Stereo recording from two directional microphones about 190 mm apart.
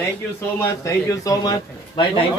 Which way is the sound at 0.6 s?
15° left (ahead or behind).